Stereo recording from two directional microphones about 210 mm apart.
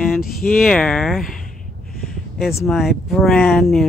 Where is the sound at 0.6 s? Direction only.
5° left (ahead or behind).